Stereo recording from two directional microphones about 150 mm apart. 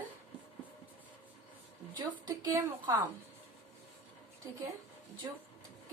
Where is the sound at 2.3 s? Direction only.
20° right (ahead or behind).